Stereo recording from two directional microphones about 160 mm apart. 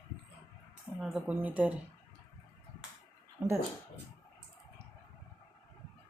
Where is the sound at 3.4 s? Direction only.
15° right (ahead or behind).